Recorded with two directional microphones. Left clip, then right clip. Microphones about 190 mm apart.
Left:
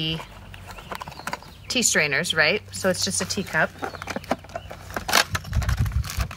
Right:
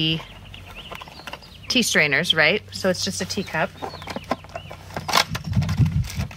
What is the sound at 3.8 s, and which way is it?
Speech, 10° left (ahead or behind).